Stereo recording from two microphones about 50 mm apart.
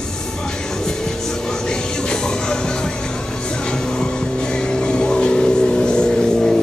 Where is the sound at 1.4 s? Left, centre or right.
Centre.